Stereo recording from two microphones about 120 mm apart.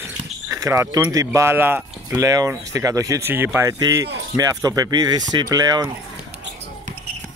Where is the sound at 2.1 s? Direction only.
30° right (ahead or behind).